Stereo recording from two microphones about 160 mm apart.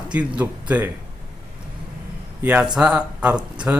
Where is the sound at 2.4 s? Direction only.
10° right (ahead or behind).